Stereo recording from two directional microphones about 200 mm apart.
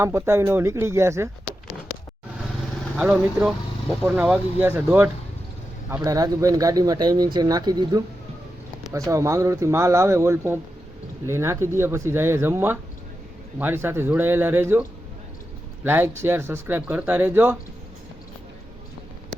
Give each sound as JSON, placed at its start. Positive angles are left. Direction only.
{"t": 0.0, "sound": "speech", "side_deg": -15}
{"t": 2.9, "sound": "speech", "side_deg": -5}